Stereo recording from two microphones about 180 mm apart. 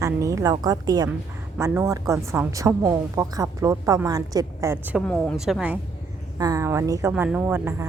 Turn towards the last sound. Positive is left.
turn(degrees=-10)  # may be behind; listen again after turning